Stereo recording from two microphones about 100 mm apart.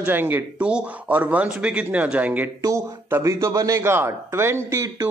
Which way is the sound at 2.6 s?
30° right (ahead or behind).